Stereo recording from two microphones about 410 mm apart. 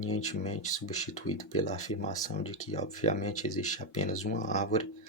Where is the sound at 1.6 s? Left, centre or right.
Centre.